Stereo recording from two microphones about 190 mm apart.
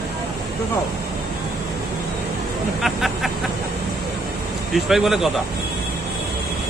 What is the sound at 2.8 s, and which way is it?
Speech, centre (ahead or behind).